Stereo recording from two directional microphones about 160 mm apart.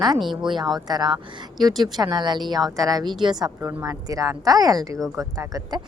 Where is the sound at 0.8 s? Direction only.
25° right (ahead or behind).